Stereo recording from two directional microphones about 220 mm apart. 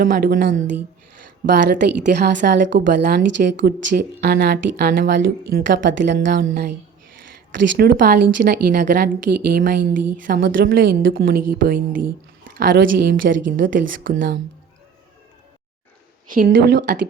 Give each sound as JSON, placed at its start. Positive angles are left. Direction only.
{"t": 0.0, "sound": "a woman's voice", "side_deg": -40}
{"t": 1.7, "sound": "a woman's voice", "side_deg": -50}
{"t": 7.8, "sound": "a woman's voice", "side_deg": -45}
{"t": 12.5, "sound": "a sound", "side_deg": -40}
{"t": 12.8, "sound": "a woman's voice", "side_deg": -45}
{"t": 16.3, "sound": "a woman's voice", "side_deg": -40}